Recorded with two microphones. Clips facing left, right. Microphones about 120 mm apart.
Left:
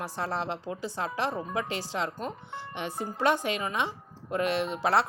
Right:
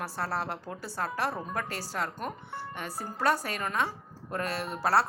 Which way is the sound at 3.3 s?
40° right (ahead or behind).